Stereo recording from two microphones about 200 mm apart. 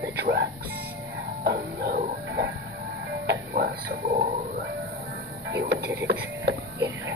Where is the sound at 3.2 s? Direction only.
50° right (ahead or behind).